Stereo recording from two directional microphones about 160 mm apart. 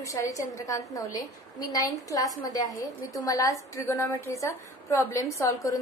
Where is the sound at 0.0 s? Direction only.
20° left (ahead or behind).